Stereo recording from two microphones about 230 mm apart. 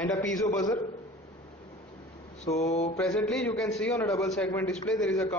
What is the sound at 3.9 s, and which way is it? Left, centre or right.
A man's voice, centre.